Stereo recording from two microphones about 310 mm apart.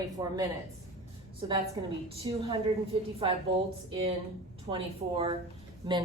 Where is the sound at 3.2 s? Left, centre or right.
Centre.